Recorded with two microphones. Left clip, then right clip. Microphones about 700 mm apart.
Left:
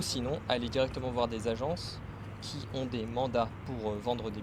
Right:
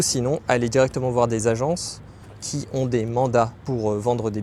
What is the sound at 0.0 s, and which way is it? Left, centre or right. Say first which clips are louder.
Speech: right 12 dB; right.